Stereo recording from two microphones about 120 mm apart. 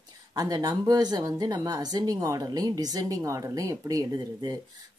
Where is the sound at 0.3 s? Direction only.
30° right (ahead or behind).